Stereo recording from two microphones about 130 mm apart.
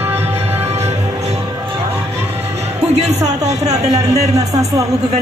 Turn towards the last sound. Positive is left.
turn(degrees=-25)  # may be behind; listen again after turning